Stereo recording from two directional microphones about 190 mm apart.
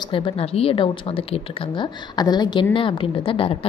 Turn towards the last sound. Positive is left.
turn(degrees=30)  # may be behind; listen again after turning